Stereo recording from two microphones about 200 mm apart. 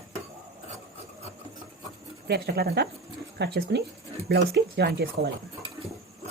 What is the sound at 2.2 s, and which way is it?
Speech, 50° right (ahead or behind).